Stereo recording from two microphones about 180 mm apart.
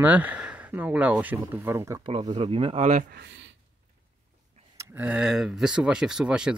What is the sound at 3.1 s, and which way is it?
Speech, 90° right.